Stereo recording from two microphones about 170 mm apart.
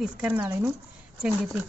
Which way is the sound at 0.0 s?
5° right (ahead or behind).